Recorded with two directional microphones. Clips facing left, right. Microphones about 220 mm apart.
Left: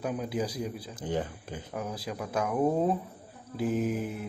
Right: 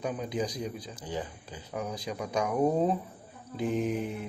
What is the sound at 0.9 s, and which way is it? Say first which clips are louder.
Speech: left 4 dB; 55° left (ahead or behind).